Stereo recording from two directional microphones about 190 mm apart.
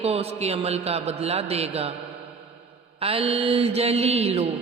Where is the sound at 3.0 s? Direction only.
30° right (ahead or behind).